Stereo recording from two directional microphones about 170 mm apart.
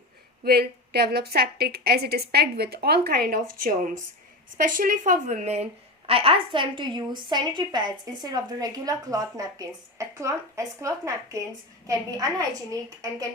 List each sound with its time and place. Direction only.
0.4 s a woman's voice: 70° right (ahead or behind); by 12.5 s 20° right (ahead or behind)